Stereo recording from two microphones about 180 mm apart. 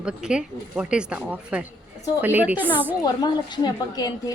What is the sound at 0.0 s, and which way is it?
A woman's voice, 5° right (ahead or behind).